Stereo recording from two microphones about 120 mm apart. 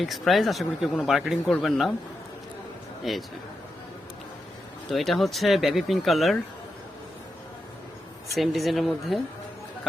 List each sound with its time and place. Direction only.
0.0 s speech: centre (ahead or behind)
3.0 s a man's voice: centre (ahead or behind)
4.9 s speech: centre (ahead or behind)
8.4 s speech: centre (ahead or behind)